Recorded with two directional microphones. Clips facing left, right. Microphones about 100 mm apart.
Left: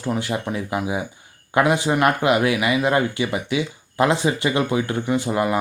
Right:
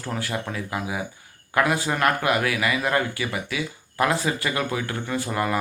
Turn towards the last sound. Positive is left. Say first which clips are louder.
# left 5 dB
turn(degrees=20)  # may be behind; listen again after turning